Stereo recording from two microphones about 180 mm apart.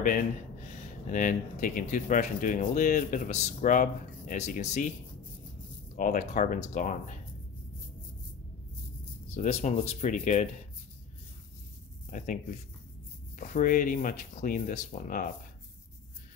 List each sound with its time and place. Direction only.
1.1 s speech: 45° left (ahead or behind)
5.9 s speech: 45° left (ahead or behind)
9.3 s speech: 35° left (ahead or behind)
12.1 s speech: 45° left (ahead or behind)
13.4 s speech: 45° left (ahead or behind)